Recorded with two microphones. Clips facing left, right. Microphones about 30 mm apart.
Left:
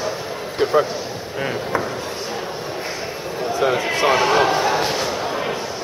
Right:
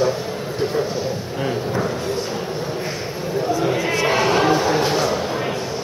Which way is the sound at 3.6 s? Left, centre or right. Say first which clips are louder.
Left 6 dB; left.